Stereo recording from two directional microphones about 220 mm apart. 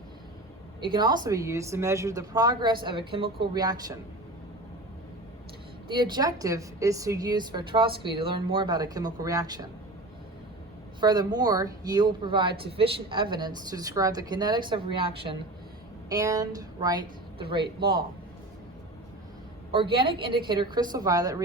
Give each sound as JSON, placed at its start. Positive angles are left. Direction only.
{"t": 0.8, "sound": "a woman's voice", "side_deg": -20}
{"t": 5.9, "sound": "a woman's voice", "side_deg": -20}
{"t": 11.0, "sound": "a woman's voice", "side_deg": -20}
{"t": 20.0, "sound": "speech", "side_deg": -25}